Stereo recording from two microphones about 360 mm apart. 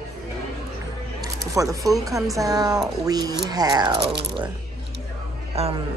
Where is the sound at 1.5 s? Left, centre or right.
Centre.